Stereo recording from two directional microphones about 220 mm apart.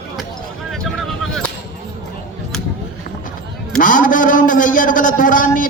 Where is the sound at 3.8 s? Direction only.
35° left (ahead or behind).